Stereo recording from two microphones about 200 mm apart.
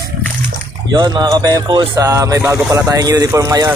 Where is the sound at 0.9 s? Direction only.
20° right (ahead or behind).